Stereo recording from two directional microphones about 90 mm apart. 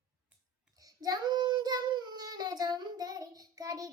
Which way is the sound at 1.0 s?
45° right (ahead or behind).